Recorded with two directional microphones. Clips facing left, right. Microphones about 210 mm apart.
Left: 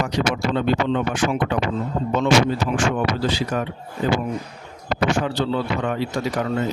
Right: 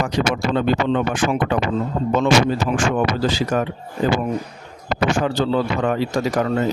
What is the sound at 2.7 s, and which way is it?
Speech, 50° right (ahead or behind).